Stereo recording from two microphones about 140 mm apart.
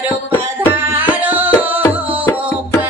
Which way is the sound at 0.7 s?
15° right (ahead or behind).